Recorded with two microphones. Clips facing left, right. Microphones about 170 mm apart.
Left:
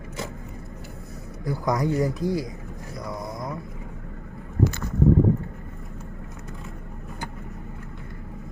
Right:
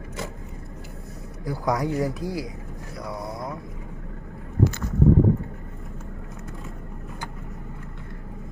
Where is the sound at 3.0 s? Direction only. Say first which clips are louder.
Even; 5° right (ahead or behind).